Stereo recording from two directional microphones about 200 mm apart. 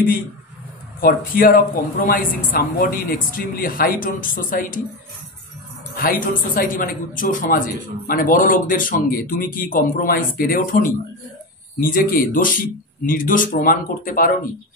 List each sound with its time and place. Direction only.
1.0 s speech: 45° left (ahead or behind)
5.9 s speech: 45° left (ahead or behind)